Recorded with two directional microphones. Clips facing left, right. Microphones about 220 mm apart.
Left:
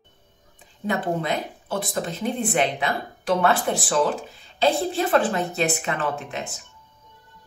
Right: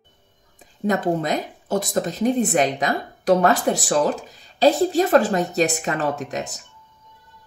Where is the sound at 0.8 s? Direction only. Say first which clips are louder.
Right 4 dB; 40° right (ahead or behind).